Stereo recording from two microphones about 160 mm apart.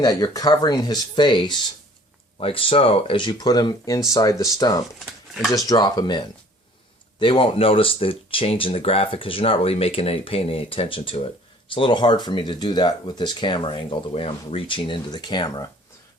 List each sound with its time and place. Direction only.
0.0 s speech: 25° left (ahead or behind)